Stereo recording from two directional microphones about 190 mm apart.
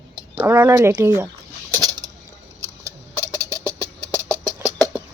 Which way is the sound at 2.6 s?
15° right (ahead or behind).